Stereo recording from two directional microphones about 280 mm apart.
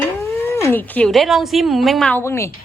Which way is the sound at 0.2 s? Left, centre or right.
Centre.